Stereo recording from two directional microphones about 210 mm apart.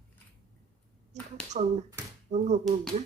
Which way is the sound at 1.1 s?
35° right (ahead or behind).